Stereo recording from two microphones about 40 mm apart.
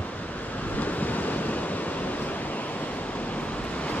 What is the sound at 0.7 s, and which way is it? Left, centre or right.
Waves, left.